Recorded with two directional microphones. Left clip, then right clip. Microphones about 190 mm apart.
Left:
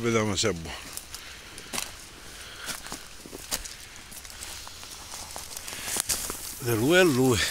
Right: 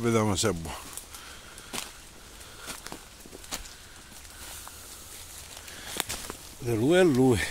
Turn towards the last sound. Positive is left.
turn(degrees=-25)  # may be behind; listen again after turning